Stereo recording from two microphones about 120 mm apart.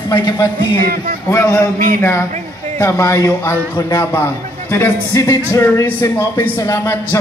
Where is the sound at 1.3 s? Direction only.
20° left (ahead or behind).